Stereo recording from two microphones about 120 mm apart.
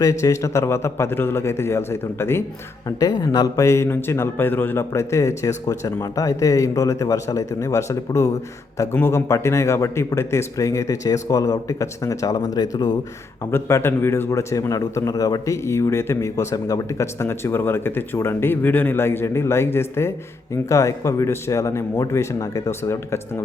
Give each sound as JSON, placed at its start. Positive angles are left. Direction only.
{"t": 0.0, "sound": "a man's voice", "side_deg": 25}
{"t": 3.0, "sound": "a man's voice", "side_deg": 30}
{"t": 13.5, "sound": "a man's voice", "side_deg": 20}